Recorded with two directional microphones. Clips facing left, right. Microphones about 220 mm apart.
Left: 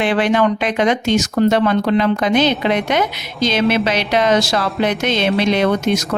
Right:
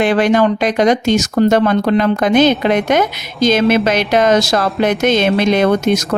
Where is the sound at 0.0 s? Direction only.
45° right (ahead or behind).